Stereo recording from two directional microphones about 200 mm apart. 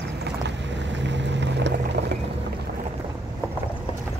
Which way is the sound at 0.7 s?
60° right (ahead or behind).